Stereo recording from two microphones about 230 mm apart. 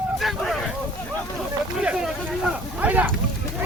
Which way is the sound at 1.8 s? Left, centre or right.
Centre.